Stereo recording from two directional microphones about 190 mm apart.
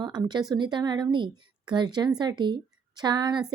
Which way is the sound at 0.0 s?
20° right (ahead or behind).